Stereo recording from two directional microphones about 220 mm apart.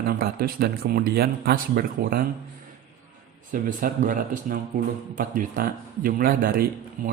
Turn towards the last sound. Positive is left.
turn(degrees=-40)  # may be behind; listen again after turning